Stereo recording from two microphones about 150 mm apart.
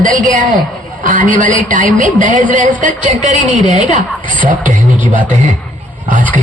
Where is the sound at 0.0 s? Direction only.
60° right (ahead or behind).